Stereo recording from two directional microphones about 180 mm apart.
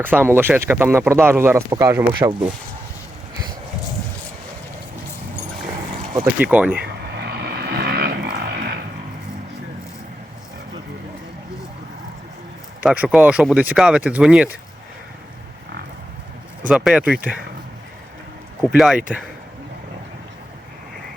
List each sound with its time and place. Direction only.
0.0 s speech: 10° right (ahead or behind)
6.4 s speech: 10° right (ahead or behind)
6.7 s vehicle: 65° right (ahead or behind)
12.8 s speech: 5° right (ahead or behind)
16.6 s speech: centre (ahead or behind)
18.7 s speech: 5° right (ahead or behind)